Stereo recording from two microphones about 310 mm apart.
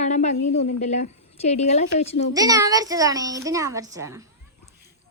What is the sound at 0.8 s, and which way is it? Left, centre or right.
A woman's voice, left.